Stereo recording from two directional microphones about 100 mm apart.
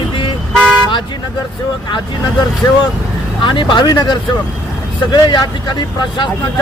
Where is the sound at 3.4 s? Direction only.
55° left (ahead or behind).